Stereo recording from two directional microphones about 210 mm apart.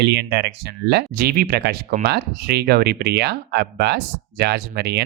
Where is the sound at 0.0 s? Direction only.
55° right (ahead or behind).